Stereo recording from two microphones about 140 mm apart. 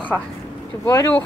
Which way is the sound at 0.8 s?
20° left (ahead or behind).